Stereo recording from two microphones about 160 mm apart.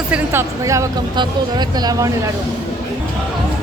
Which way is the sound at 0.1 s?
15° right (ahead or behind).